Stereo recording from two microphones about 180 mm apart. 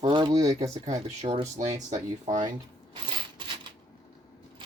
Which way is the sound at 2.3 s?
40° right (ahead or behind).